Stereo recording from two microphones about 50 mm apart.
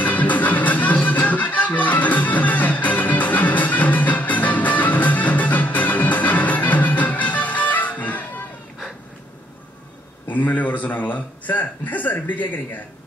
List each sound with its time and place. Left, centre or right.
0.0 s music: left
10.3 s a man's voice: left